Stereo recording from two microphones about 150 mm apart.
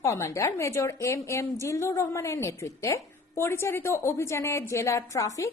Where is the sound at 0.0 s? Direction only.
20° left (ahead or behind).